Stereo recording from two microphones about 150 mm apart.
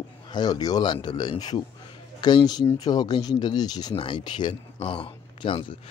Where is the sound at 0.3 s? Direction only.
25° left (ahead or behind).